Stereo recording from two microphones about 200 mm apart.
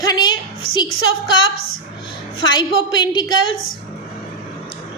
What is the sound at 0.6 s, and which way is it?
Speech, 50° left (ahead or behind).